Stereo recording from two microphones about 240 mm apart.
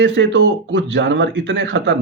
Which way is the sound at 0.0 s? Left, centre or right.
Right.